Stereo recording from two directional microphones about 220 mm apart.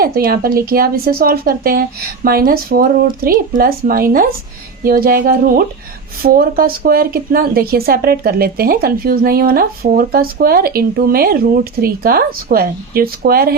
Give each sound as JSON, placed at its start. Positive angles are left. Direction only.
{"t": 0.0, "sound": "speech", "side_deg": -45}